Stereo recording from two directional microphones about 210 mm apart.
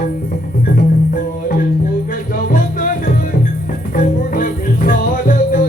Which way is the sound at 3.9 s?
40° left (ahead or behind).